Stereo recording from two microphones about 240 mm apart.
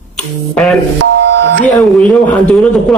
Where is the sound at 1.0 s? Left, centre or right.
Right.